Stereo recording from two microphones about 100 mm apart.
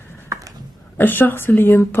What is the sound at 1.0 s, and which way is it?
Speech, 20° left (ahead or behind).